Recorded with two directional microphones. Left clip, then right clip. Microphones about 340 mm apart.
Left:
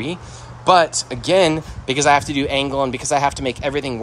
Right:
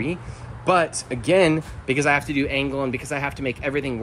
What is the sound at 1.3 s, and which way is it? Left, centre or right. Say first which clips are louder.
Speech: left 3 dB; centre.